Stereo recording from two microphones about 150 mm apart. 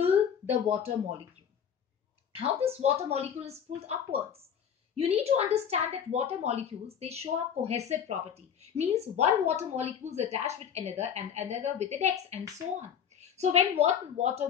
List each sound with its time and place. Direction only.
0.0 s speech: 40° right (ahead or behind)
2.6 s a woman's voice: 40° right (ahead or behind)